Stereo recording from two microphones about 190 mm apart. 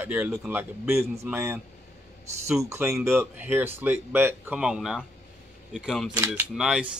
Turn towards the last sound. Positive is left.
turn(degrees=-5)  # may be behind; listen again after turning